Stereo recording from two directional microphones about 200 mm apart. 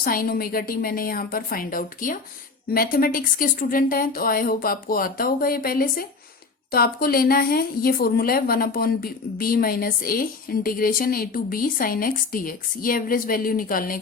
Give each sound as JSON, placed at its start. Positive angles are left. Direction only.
{"t": 0.0, "sound": "speech", "side_deg": 45}